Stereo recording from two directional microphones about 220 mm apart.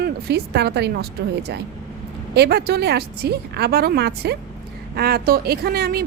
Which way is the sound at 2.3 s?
50° right (ahead or behind).